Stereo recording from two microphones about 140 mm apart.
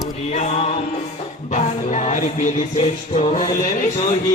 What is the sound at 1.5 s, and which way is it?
Music, 60° left (ahead or behind).